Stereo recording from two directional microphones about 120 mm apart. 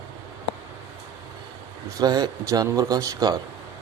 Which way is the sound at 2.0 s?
35° right (ahead or behind).